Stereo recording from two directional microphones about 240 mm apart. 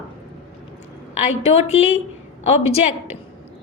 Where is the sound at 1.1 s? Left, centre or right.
Left.